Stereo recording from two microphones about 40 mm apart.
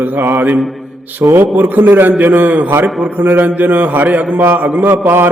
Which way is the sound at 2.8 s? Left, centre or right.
Centre.